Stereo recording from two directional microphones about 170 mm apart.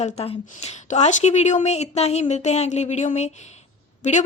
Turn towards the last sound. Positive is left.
turn(degrees=45)  # may be behind; listen again after turning